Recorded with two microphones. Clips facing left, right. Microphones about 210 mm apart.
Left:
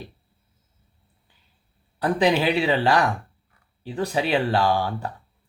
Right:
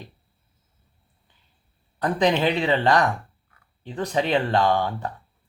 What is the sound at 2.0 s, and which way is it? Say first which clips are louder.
Speech: left 1 dB; 10° left (ahead or behind).